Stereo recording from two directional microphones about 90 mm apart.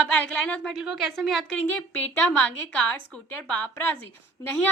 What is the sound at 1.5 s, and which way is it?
A woman's voice, 15° left (ahead or behind).